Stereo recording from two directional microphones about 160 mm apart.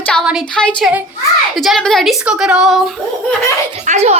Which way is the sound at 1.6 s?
Centre (ahead or behind).